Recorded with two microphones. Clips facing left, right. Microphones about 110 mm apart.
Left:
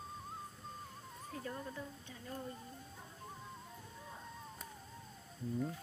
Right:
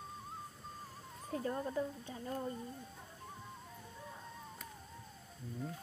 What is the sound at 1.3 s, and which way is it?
Speech, 35° right (ahead or behind).